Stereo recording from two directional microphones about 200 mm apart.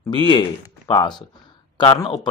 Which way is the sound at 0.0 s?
20° left (ahead or behind).